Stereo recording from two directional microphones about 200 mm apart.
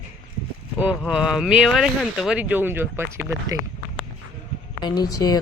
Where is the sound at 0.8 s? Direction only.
5° right (ahead or behind).